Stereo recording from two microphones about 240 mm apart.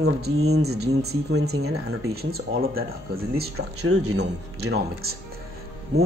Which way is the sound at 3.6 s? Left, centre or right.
Right.